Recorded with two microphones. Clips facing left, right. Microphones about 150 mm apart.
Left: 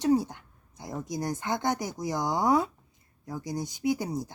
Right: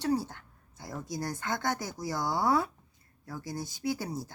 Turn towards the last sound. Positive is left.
turn(degrees=20)  # may be behind; listen again after turning